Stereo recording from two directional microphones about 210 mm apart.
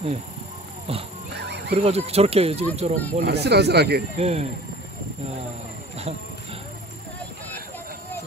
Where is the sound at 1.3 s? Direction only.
55° right (ahead or behind).